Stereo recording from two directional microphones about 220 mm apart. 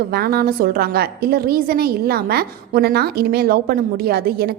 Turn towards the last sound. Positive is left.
turn(degrees=-45)  # may be behind; listen again after turning